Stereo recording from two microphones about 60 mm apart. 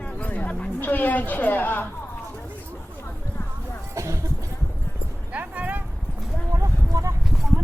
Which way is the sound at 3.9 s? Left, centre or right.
Right.